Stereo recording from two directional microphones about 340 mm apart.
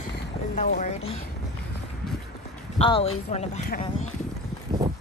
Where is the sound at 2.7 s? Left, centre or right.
Centre.